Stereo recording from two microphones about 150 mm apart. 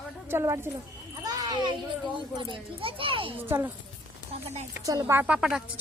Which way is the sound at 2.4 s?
35° right (ahead or behind).